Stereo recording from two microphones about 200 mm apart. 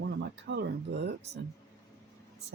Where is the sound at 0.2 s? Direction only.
60° right (ahead or behind).